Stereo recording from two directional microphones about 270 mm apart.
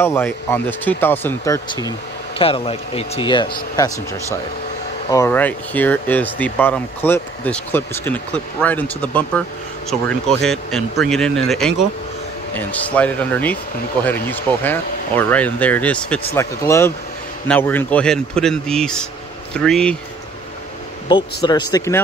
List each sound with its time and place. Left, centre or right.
0.0 s speech: centre
5.1 s speech: centre
21.1 s speech: centre